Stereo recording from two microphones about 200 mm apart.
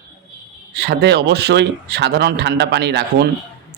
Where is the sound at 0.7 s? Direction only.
55° right (ahead or behind).